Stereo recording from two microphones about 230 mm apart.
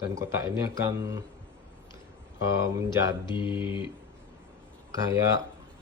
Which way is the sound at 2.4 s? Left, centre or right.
Centre.